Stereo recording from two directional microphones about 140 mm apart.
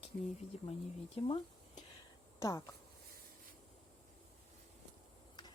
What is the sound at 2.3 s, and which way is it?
Speech, 20° left (ahead or behind).